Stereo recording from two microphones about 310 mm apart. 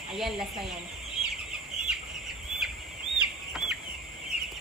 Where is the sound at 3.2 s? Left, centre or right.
Centre.